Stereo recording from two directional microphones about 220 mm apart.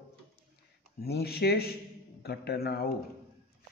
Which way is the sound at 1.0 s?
45° left (ahead or behind).